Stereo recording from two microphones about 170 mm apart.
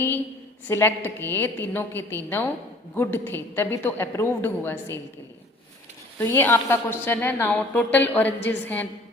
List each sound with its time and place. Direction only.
0.7 s a woman's voice: 15° left (ahead or behind)
6.1 s a woman's voice: 15° left (ahead or behind)